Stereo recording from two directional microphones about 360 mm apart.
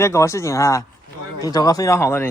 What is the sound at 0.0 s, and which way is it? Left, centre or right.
A man's voice, centre.